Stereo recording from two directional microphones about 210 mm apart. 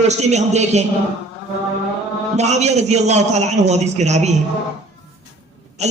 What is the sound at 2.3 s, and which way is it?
A man's voice, 30° right (ahead or behind).